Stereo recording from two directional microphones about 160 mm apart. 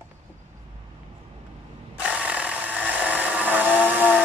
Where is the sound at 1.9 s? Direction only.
10° right (ahead or behind).